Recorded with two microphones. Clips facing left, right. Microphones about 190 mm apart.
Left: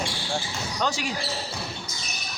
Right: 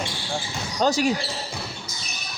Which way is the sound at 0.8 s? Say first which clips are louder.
Right 8 dB; 40° right (ahead or behind).